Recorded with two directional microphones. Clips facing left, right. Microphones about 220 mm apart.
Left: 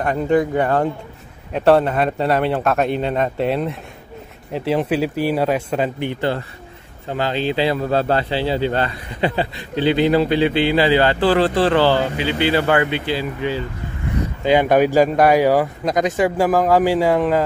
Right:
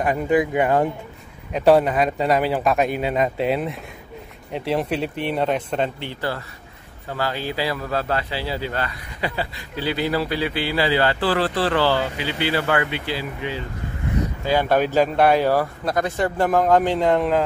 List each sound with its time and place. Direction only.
0.0 s a man's voice: 5° right (ahead or behind); by 13.2 s 25° left (ahead or behind)
14.4 s speech: 20° left (ahead or behind)